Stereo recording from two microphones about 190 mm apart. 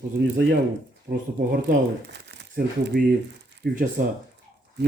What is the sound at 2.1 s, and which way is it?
Crumpling, 65° right (ahead or behind).